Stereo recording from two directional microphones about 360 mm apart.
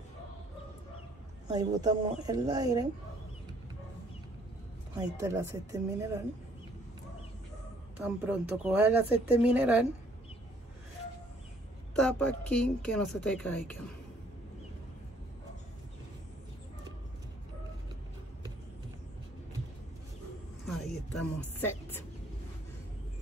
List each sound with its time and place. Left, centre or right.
1.5 s a woman's voice: centre
4.9 s a woman's voice: centre
8.0 s speech: centre
11.9 s speech: centre
20.6 s speech: centre